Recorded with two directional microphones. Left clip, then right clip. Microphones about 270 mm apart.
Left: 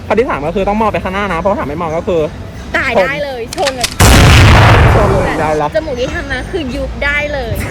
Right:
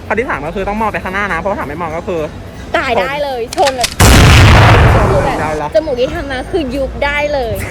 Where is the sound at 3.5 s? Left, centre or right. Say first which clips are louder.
Right 3 dB; centre.